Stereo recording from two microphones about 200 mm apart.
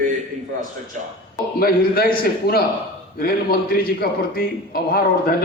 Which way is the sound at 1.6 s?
50° left (ahead or behind).